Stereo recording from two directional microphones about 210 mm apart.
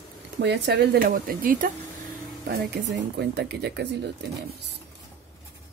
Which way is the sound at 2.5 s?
55° right (ahead or behind).